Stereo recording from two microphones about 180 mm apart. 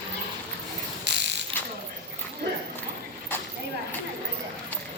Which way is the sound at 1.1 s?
75° right (ahead or behind).